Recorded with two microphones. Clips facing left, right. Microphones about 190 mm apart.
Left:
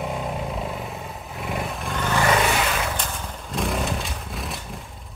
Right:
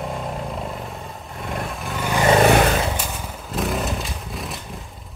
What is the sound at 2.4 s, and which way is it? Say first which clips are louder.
Vehicle: right 8 dB; 55° right (ahead or behind).